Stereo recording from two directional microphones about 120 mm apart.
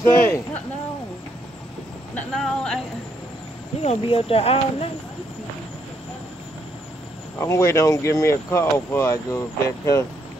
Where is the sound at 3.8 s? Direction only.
55° left (ahead or behind).